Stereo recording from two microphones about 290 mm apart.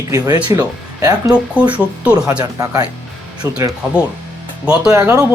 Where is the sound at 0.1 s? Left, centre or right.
Centre.